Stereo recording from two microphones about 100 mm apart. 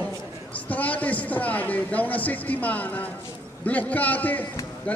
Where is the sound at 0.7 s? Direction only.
15° left (ahead or behind).